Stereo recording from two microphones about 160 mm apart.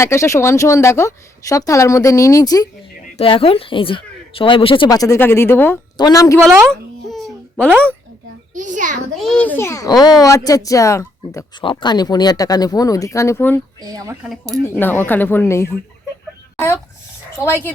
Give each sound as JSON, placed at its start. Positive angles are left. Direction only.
{"t": 0.0, "sound": "speech", "side_deg": 15}
{"t": 3.2, "sound": "speech", "side_deg": 35}
{"t": 6.7, "sound": "a sound", "side_deg": 0}
{"t": 8.5, "sound": "a child's voice", "side_deg": -50}
{"t": 9.1, "sound": "speech", "side_deg": 5}
{"t": 11.6, "sound": "speech", "side_deg": 30}
{"t": 13.8, "sound": "speech", "side_deg": -20}
{"t": 14.7, "sound": "speech", "side_deg": 10}
{"t": 17.3, "sound": "speech", "side_deg": 15}